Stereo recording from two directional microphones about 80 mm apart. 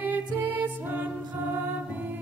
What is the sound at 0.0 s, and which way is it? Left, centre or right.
Music, right.